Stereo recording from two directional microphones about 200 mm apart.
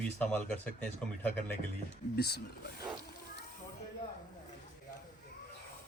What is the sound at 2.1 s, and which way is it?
Speech, 55° left (ahead or behind).